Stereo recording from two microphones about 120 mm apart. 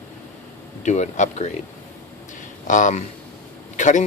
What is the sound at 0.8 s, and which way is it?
Speech, 75° left (ahead or behind).